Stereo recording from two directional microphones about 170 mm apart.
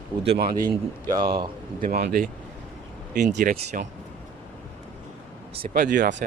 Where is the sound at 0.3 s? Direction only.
70° right (ahead or behind).